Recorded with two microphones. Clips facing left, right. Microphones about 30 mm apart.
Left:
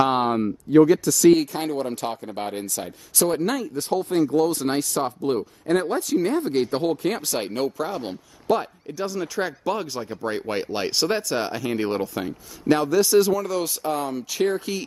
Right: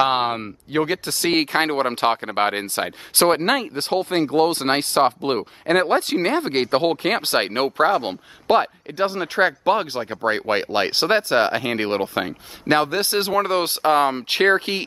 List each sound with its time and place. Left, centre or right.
0.0 s speech: right